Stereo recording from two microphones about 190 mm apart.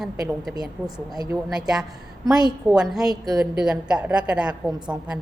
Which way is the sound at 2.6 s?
Centre (ahead or behind).